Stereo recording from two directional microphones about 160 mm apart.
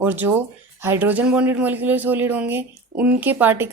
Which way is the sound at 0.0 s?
10° right (ahead or behind).